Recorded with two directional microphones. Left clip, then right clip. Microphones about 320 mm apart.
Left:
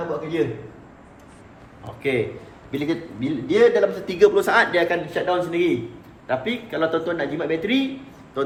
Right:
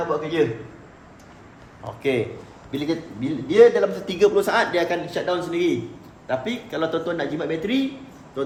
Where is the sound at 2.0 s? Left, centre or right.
Centre.